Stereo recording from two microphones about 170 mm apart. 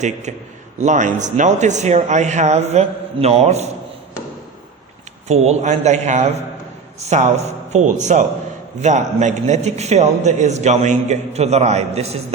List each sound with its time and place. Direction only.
0.0 s speech: 45° right (ahead or behind)
5.3 s a man's voice: 40° right (ahead or behind)